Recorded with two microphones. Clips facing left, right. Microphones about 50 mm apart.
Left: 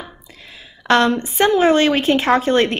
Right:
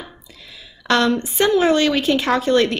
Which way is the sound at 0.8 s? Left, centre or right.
Left.